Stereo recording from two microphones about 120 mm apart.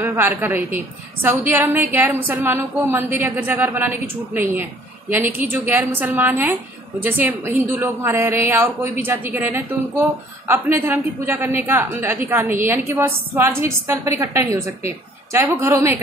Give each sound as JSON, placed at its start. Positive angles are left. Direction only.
{"t": 0.0, "sound": "a woman's voice", "side_deg": -15}